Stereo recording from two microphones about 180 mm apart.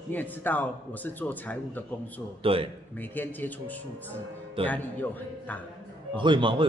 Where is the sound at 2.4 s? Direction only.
30° right (ahead or behind).